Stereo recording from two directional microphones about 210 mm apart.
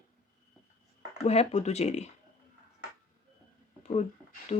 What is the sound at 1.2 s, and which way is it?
Speech, 30° left (ahead or behind).